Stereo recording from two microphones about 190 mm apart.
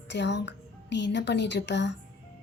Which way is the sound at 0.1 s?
65° left (ahead or behind).